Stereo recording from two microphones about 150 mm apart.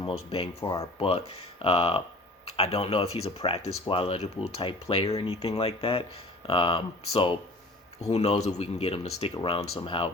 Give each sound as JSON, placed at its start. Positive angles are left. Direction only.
{"t": 0.0, "sound": "speech", "side_deg": 40}